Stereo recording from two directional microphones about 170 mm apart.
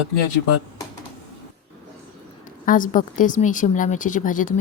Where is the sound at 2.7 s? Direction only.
50° left (ahead or behind).